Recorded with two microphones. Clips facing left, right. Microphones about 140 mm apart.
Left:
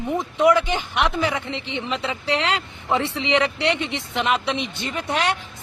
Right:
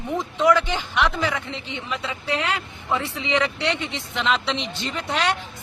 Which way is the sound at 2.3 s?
75° left (ahead or behind).